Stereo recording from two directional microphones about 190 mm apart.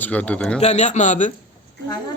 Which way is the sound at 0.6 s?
35° left (ahead or behind).